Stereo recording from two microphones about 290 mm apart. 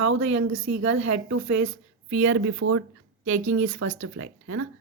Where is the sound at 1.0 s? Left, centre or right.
Right.